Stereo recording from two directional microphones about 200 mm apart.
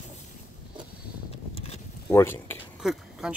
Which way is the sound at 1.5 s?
30° left (ahead or behind).